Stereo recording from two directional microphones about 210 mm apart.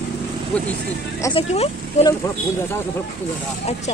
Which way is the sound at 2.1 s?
15° left (ahead or behind).